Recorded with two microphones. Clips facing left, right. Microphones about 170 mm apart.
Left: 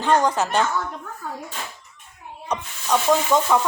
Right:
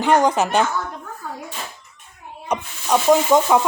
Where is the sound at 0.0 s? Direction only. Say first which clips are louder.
Right 3 dB; 15° right (ahead or behind).